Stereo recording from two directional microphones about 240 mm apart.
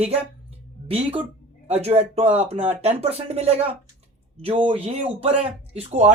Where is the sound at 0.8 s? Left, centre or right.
Right.